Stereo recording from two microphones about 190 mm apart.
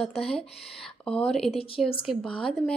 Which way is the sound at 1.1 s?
5° left (ahead or behind).